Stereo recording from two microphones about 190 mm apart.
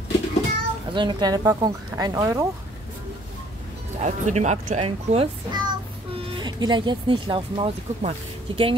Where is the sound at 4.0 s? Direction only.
40° right (ahead or behind).